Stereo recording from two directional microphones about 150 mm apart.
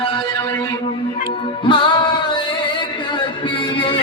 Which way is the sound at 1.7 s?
30° left (ahead or behind).